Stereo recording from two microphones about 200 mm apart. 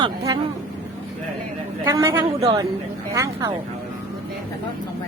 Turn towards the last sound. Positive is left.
turn(degrees=-15)  # may be behind; listen again after turning